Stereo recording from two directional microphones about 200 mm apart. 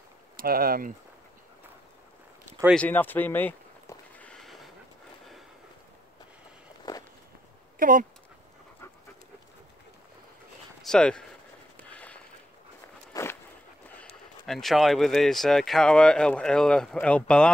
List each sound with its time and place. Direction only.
0.4 s speech: 45° right (ahead or behind)
2.7 s a sound: 5° left (ahead or behind)
6.9 s walk: 20° left (ahead or behind)
7.8 s speech: 45° right (ahead or behind)
10.8 s speech: 5° left (ahead or behind)
11.9 s a sound: 5° left (ahead or behind)
13.1 s walk: 15° left (ahead or behind)
14.4 s speech: centre (ahead or behind)